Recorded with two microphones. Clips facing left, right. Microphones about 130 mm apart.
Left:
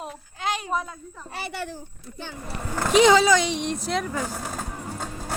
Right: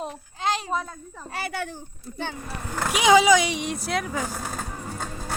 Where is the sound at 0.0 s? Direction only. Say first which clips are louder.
Right 2 dB; 30° right (ahead or behind).